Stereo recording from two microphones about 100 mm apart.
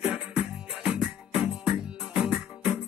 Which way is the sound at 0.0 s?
10° right (ahead or behind).